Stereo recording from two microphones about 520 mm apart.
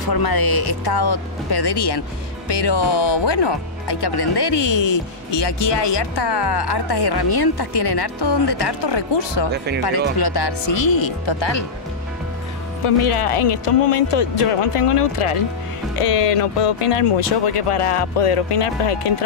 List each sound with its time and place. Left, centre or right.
0.0 s speech: left
12.8 s speech: left
16.0 s speech: left